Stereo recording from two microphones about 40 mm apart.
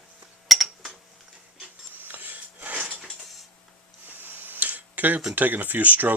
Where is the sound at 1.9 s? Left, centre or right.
Right.